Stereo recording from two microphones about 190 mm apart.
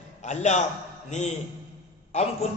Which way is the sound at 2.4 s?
35° left (ahead or behind).